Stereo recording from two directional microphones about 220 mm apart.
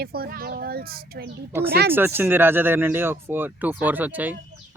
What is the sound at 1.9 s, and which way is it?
Speech, 10° right (ahead or behind).